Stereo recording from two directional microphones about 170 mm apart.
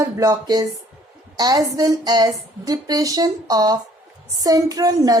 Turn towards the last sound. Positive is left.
turn(degrees=-20)  # may be behind; listen again after turning